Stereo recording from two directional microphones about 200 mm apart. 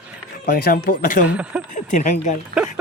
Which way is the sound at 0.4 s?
45° left (ahead or behind).